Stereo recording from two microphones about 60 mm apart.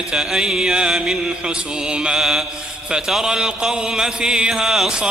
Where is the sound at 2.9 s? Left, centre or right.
Centre.